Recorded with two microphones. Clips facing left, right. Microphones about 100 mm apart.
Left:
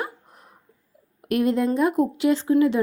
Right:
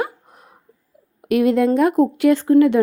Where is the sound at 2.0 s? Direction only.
50° right (ahead or behind).